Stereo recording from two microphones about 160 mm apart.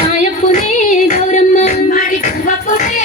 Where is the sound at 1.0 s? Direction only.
50° left (ahead or behind).